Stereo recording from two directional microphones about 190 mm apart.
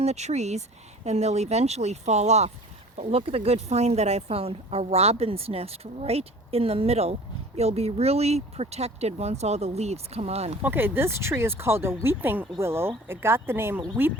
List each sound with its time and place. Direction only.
0.0 s speech: 35° right (ahead or behind)
10.6 s speech: 10° right (ahead or behind)